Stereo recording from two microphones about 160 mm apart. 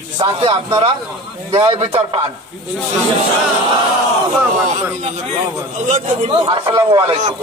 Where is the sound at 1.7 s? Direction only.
40° right (ahead or behind).